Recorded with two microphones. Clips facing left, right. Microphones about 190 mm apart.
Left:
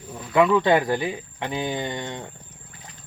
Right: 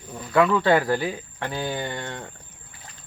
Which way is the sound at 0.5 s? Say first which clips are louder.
Left 1 dB; 15° left (ahead or behind).